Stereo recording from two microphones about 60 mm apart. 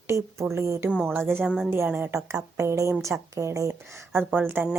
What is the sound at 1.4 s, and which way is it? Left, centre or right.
Speech, centre.